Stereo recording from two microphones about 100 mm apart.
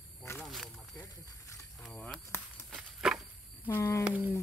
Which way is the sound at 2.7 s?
5° right (ahead or behind).